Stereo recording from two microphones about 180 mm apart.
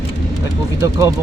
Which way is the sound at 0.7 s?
15° right (ahead or behind).